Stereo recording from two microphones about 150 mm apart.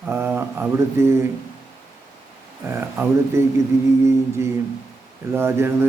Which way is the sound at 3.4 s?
15° right (ahead or behind).